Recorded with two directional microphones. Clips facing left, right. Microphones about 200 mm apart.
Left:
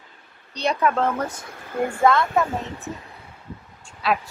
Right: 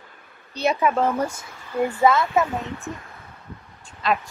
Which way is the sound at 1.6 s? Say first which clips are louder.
Right 1 dB; 50° left (ahead or behind).